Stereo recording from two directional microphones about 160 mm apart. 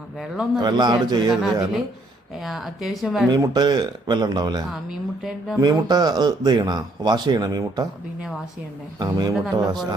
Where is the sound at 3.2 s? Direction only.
25° right (ahead or behind).